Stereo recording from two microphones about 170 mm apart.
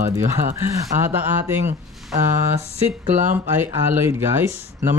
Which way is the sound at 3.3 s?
15° right (ahead or behind).